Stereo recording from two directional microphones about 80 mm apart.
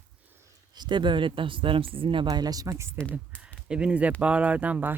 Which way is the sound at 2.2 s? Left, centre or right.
Right.